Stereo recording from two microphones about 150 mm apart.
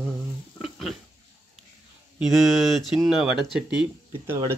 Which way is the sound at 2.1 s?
Centre (ahead or behind).